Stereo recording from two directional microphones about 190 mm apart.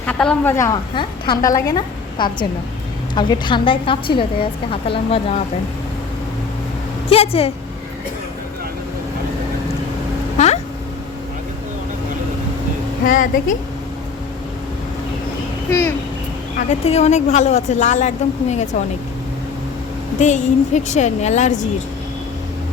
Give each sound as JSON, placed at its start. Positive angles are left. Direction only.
{"t": 0.0, "sound": "a woman's voice", "side_deg": 5}
{"t": 7.1, "sound": "a woman's voice", "side_deg": 30}
{"t": 10.3, "sound": "a sound", "side_deg": 35}
{"t": 13.1, "sound": "a woman's voice", "side_deg": 45}
{"t": 16.6, "sound": "a woman's voice", "side_deg": 35}
{"t": 20.1, "sound": "a woman's voice", "side_deg": 40}